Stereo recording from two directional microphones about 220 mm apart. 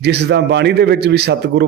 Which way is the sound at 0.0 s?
50° right (ahead or behind).